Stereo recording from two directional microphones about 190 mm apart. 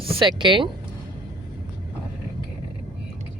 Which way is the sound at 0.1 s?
25° right (ahead or behind).